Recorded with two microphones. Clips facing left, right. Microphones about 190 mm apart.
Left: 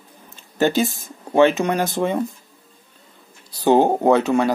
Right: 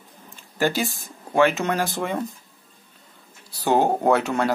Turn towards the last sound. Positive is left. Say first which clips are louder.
# left 4 dB
turn(degrees=15)  # may be behind; listen again after turning